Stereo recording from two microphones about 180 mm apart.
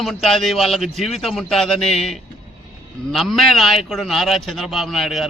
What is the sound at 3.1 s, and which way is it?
A man's voice, centre (ahead or behind).